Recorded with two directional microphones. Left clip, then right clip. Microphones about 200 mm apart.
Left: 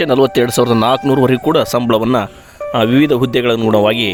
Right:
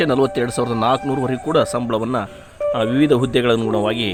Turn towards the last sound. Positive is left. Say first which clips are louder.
# left 7 dB
turn(degrees=50)  # may be behind; listen again after turning